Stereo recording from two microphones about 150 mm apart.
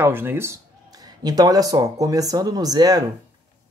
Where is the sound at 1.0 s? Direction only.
25° right (ahead or behind).